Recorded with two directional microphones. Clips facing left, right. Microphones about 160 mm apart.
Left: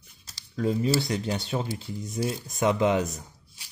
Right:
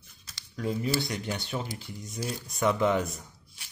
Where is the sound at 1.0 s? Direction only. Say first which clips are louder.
Left 5 dB; 25° left (ahead or behind).